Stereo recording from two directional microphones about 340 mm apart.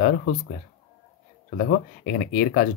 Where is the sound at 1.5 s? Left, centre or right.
Left.